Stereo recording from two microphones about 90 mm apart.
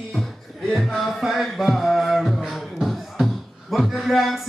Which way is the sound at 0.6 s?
Centre (ahead or behind).